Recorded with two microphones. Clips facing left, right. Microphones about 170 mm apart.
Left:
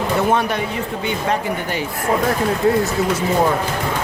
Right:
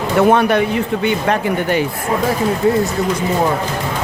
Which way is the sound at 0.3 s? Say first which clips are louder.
Right 6 dB; 65° right (ahead or behind).